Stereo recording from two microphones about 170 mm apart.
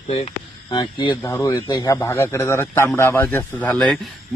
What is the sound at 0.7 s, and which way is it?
Speech, 30° left (ahead or behind).